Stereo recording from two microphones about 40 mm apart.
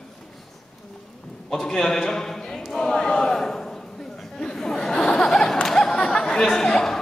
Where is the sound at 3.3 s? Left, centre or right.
Centre.